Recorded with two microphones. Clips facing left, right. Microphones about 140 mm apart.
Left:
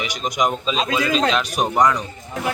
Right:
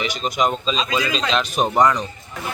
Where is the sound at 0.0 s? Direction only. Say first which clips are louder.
Right 1 dB; 10° left (ahead or behind).